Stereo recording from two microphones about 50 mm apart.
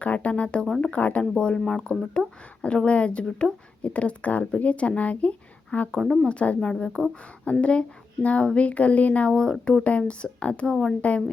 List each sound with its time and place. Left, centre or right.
0.0 s a woman's voice: left
6.6 s speech: centre
7.6 s a woman's voice: left
9.3 s a woman's voice: centre